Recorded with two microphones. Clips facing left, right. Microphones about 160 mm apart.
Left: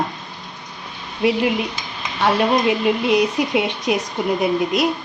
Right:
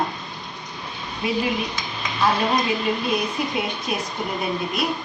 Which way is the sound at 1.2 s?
75° left (ahead or behind).